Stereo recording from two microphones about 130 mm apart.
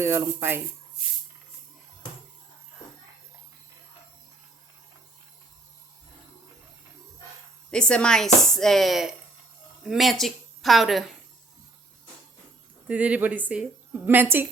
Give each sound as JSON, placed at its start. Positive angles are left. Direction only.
{"t": 0.0, "sound": "speech", "side_deg": -20}
{"t": 7.7, "sound": "a woman's voice", "side_deg": 5}
{"t": 12.9, "sound": "a woman's voice", "side_deg": -10}